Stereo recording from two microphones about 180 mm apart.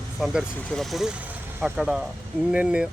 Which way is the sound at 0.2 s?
Centre (ahead or behind).